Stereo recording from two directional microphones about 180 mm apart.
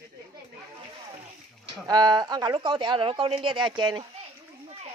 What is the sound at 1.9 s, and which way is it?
Speech, 20° right (ahead or behind).